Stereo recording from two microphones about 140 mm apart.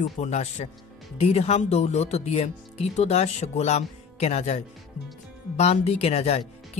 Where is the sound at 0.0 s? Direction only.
55° left (ahead or behind).